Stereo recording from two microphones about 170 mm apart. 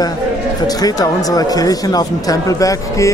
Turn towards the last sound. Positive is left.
turn(degrees=20)  # may be behind; listen again after turning